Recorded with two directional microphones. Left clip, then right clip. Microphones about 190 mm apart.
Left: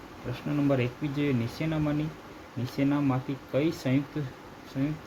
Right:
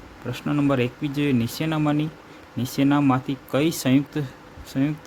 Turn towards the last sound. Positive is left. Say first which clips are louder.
# right 7 dB
turn(degrees=-40)  # may be behind; listen again after turning